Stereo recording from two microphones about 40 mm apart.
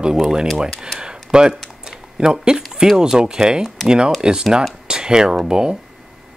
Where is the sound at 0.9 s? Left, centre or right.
Right.